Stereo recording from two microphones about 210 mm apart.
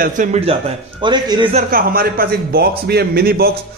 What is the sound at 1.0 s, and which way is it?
Speech, 20° right (ahead or behind).